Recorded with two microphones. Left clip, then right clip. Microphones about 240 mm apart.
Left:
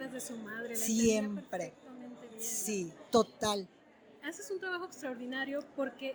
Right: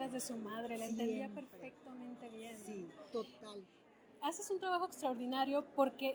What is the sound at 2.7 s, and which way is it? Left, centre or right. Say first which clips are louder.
Speech: left 15 dB; left.